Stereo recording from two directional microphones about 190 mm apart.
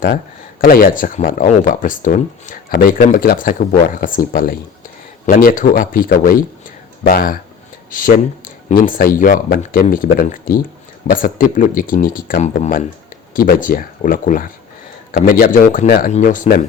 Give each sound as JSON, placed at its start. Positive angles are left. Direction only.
{"t": 0.6, "sound": "speech", "side_deg": 50}